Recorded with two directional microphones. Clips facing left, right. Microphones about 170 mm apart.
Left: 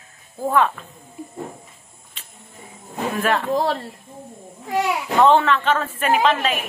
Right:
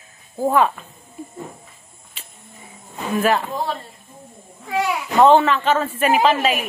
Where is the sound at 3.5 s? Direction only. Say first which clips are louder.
Left 5 dB; 80° left.